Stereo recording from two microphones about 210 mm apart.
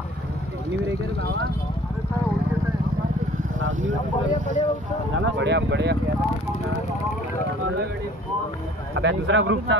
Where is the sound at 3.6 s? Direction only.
65° right (ahead or behind).